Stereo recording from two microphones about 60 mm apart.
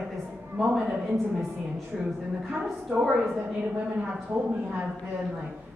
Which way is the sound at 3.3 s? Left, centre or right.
Centre.